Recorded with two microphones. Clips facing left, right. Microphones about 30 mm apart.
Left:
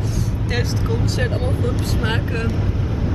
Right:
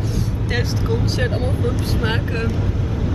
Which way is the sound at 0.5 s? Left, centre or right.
Centre.